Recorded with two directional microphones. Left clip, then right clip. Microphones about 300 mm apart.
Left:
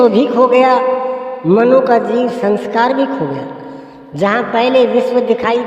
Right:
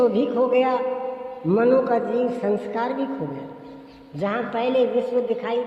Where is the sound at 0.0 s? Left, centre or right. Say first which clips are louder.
Left 10 dB; left.